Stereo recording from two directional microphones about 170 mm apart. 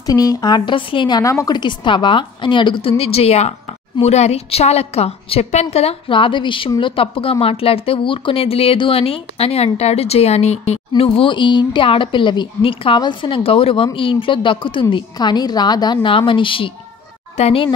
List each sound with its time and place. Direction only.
0.0 s a woman's voice: 20° left (ahead or behind)